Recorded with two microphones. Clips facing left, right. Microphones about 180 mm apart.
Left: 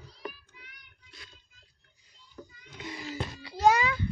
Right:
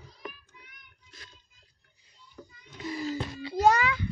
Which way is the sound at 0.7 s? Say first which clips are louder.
Even; 45° right (ahead or behind).